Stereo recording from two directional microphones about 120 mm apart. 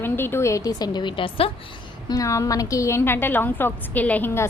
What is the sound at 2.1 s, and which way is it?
A woman's voice, 25° left (ahead or behind).